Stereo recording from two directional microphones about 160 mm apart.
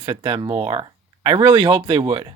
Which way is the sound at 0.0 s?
30° right (ahead or behind).